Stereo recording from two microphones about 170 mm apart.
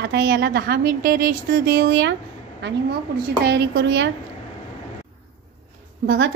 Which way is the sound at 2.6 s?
90° right.